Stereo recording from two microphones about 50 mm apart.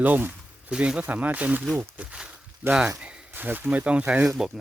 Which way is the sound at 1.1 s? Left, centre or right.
Right.